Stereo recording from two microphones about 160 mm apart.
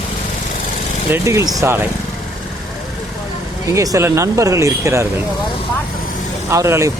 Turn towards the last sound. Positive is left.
turn(degrees=-20)  # may be behind; listen again after turning